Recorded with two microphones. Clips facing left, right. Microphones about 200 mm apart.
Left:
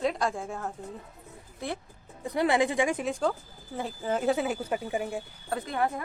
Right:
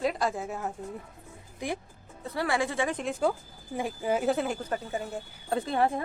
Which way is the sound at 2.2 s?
20° left (ahead or behind).